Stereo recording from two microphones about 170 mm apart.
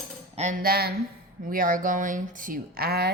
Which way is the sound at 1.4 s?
55° right (ahead or behind).